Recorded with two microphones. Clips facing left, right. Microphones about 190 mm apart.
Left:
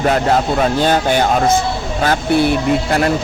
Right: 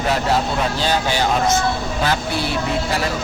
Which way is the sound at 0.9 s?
55° left (ahead or behind).